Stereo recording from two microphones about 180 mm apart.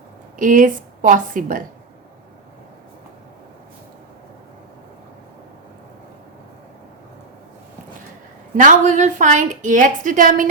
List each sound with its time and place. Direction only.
0.3 s a woman's voice: 45° right (ahead or behind)
8.5 s speech: 45° right (ahead or behind)